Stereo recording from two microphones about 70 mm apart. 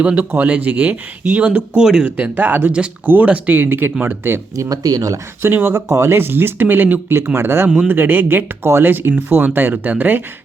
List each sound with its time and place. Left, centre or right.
0.0 s speech: right
2.0 s speech: right
4.5 s speech: right
5.7 s speech: right